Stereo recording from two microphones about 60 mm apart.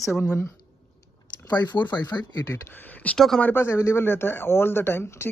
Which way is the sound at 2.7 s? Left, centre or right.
Left.